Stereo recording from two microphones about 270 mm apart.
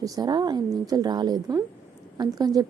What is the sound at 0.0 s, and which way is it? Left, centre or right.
A woman's voice, centre.